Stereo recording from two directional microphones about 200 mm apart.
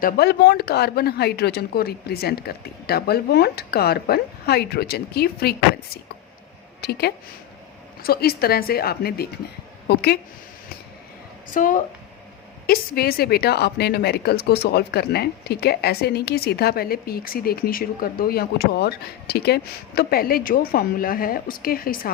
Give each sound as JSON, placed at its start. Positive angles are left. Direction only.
{"t": 0.0, "sound": "speech", "side_deg": 55}
{"t": 6.8, "sound": "speech", "side_deg": 55}
{"t": 8.0, "sound": "speech", "side_deg": 50}
{"t": 11.5, "sound": "speech", "side_deg": 40}